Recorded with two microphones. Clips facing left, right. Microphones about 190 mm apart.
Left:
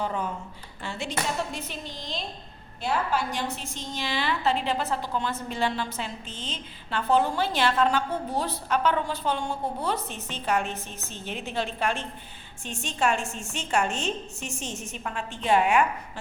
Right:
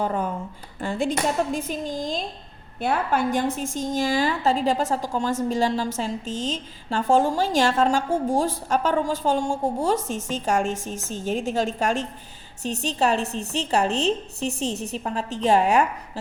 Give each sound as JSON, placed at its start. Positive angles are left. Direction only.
{"t": 0.0, "sound": "a woman's voice", "side_deg": -45}